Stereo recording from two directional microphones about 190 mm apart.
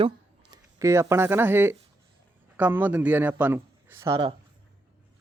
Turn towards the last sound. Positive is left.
turn(degrees=-25)  # may be behind; listen again after turning